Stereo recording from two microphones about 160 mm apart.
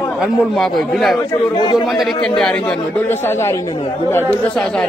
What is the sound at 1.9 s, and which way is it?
Speech, 5° left (ahead or behind).